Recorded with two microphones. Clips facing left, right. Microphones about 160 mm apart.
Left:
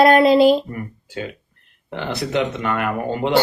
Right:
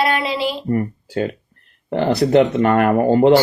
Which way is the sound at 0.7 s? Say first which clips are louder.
Right 11 dB; 45° right (ahead or behind).